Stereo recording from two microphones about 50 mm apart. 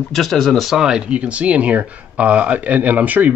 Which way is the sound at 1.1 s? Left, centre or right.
Right.